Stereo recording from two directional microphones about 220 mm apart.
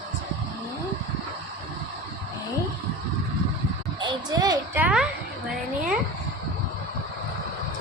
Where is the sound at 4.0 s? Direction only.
15° right (ahead or behind).